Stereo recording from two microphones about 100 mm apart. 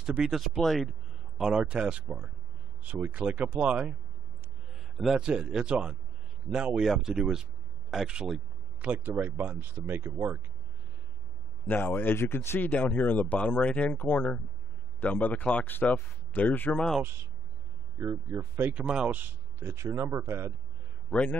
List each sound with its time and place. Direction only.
0.0 s a man's voice: 5° right (ahead or behind); by 10.4 s 25° right (ahead or behind)
11.7 s speech: 20° left (ahead or behind)
17.9 s speech: 30° right (ahead or behind)
18.8 s speech: 10° right (ahead or behind); by 20.5 s 30° right (ahead or behind)
21.1 s speech: centre (ahead or behind)